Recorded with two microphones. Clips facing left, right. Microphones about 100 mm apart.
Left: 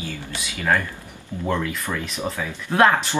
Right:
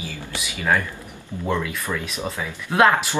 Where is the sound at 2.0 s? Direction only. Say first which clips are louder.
Left 1 dB; 10° right (ahead or behind).